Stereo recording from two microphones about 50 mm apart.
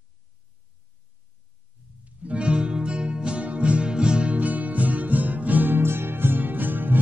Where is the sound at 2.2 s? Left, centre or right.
Right.